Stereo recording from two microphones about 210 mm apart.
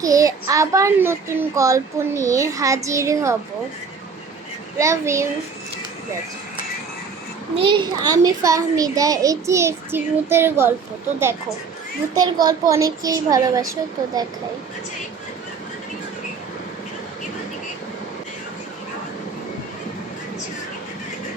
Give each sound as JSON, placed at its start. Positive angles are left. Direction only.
{"t": 0.0, "sound": "a child's voice", "side_deg": -15}
{"t": 4.8, "sound": "a child's voice", "side_deg": -15}
{"t": 7.5, "sound": "a child's voice", "side_deg": -25}
{"t": 12.1, "sound": "a child's voice", "side_deg": -20}